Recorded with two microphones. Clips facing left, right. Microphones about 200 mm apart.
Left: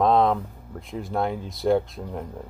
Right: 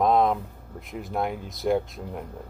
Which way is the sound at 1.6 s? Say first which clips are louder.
Left 3 dB; 10° right (ahead or behind).